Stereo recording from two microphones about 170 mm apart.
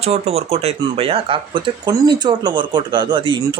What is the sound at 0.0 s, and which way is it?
Speech, 35° right (ahead or behind).